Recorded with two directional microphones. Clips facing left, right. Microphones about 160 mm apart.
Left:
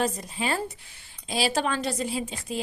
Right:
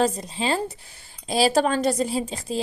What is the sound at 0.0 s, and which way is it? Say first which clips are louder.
Speech: right 5 dB; 25° right (ahead or behind).